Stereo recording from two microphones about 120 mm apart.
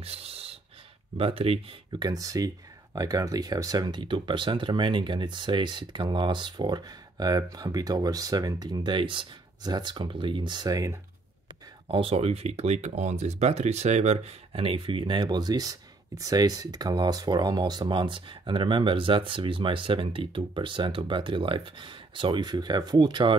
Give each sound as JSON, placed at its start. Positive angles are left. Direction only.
{"t": 0.0, "sound": "a sound", "side_deg": -55}
{"t": 1.1, "sound": "speech", "side_deg": -50}
{"t": 1.9, "sound": "speech", "side_deg": -35}
{"t": 11.9, "sound": "speech", "side_deg": -50}